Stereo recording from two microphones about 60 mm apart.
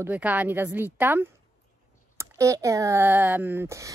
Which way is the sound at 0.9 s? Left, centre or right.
Right.